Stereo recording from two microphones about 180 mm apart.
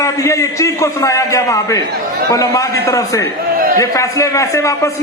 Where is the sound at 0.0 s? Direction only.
15° left (ahead or behind).